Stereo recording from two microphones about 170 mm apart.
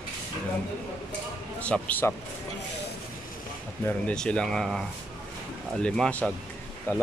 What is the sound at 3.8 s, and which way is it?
Speech, 5° left (ahead or behind).